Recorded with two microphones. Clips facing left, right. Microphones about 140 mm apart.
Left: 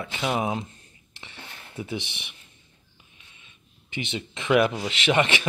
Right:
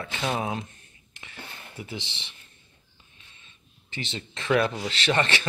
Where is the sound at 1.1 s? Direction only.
25° left (ahead or behind).